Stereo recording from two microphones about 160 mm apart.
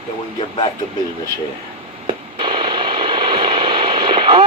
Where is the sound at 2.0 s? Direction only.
30° right (ahead or behind).